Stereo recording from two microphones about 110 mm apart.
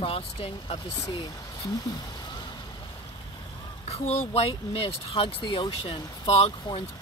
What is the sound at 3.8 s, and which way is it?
Speech, 70° left (ahead or behind).